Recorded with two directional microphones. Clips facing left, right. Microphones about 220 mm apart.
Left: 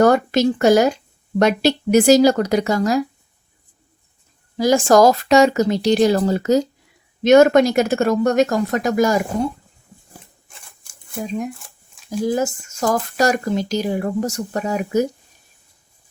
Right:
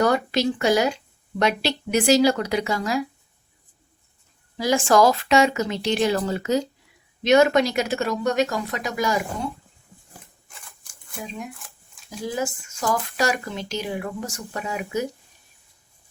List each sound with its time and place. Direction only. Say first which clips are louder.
0.0 s speech: left 6 dB; 45° left (ahead or behind)
4.5 s speech: left 5 dB; 40° left (ahead or behind)
12.2 s speech: left 7 dB; 45° left (ahead or behind)